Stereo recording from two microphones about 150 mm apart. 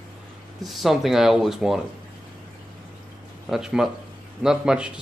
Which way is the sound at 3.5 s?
5° right (ahead or behind).